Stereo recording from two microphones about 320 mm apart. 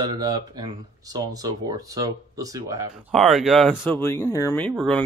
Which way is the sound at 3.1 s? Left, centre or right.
Centre.